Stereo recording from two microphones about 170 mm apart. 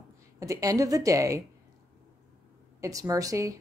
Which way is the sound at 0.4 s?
20° right (ahead or behind).